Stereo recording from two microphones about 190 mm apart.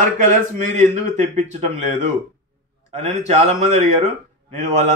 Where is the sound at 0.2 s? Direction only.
40° right (ahead or behind).